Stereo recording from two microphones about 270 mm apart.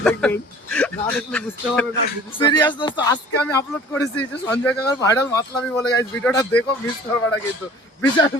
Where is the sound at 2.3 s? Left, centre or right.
Centre.